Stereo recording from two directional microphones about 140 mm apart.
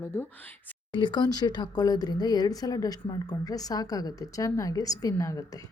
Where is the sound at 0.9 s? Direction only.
35° left (ahead or behind).